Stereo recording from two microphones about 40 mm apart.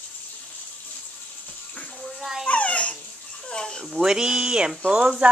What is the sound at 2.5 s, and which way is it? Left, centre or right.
Babbling, left.